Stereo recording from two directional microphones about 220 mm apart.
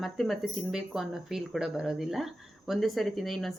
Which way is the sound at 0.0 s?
Centre (ahead or behind).